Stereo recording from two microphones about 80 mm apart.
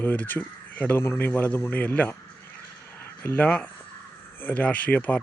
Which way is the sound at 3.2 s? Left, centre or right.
Centre.